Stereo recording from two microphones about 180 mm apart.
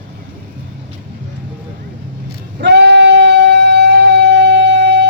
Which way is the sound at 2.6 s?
75° right (ahead or behind).